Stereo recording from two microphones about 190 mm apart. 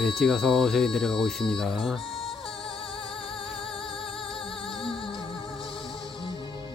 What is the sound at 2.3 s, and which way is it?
Music, 25° left (ahead or behind).